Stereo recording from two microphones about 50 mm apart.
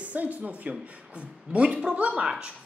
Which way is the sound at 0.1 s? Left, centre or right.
Right.